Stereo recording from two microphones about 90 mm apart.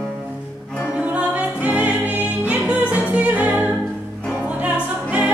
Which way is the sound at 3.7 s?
10° left (ahead or behind).